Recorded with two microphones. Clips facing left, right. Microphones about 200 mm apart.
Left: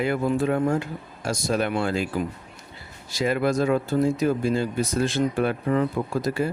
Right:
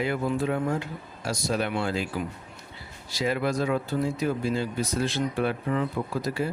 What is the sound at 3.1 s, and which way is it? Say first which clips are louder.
Speech: left 4 dB; 50° left (ahead or behind).